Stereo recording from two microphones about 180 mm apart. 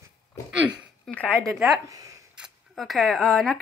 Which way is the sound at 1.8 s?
20° right (ahead or behind).